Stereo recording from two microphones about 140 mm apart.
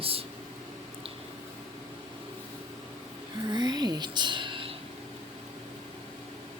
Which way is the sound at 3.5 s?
30° right (ahead or behind).